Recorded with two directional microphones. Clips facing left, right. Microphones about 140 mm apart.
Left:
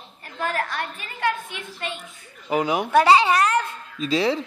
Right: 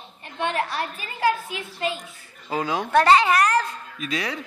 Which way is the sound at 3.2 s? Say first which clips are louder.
Even; 25° left (ahead or behind).